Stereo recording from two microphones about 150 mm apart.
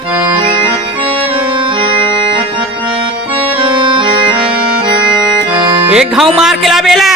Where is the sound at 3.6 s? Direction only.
35° right (ahead or behind).